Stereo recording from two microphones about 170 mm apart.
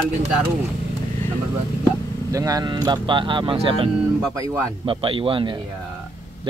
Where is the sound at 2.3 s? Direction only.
20° right (ahead or behind).